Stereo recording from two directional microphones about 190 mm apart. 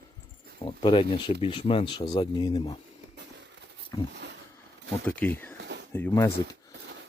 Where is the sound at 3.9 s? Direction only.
25° left (ahead or behind).